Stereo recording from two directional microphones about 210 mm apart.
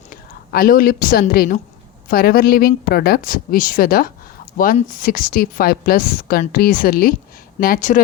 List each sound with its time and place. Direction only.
0.1 s a woman's voice: 45° left (ahead or behind)